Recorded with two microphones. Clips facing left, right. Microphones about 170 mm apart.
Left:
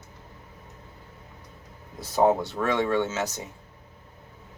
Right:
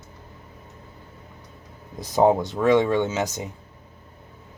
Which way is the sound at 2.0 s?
15° right (ahead or behind).